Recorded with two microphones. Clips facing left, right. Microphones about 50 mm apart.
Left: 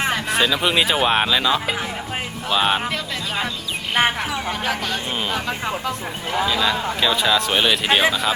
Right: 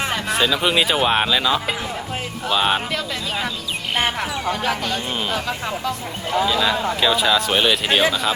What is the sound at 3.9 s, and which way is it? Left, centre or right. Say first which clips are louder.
Speech: left 3 dB; centre.